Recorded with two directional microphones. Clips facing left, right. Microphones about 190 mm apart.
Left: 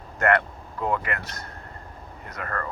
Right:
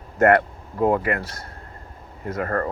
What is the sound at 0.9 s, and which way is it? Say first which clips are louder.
Speech: right 6 dB; 45° right (ahead or behind).